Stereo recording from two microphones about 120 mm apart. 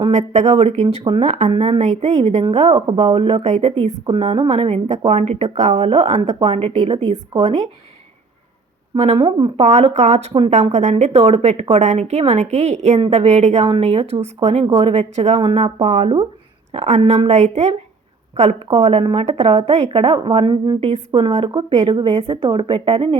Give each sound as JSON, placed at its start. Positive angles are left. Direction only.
{"t": 0.1, "sound": "a woman's voice", "side_deg": -70}
{"t": 2.5, "sound": "a woman's voice", "side_deg": -55}
{"t": 5.7, "sound": "a woman's voice", "side_deg": -45}
{"t": 6.2, "sound": "a woman's voice", "side_deg": -65}
{"t": 7.3, "sound": "a woman's voice", "side_deg": -45}
{"t": 9.1, "sound": "a woman's voice", "side_deg": -40}
{"t": 9.6, "sound": "a woman's voice", "side_deg": -60}
{"t": 20.8, "sound": "a woman's voice", "side_deg": -60}
{"t": 21.4, "sound": "a woman's voice", "side_deg": -45}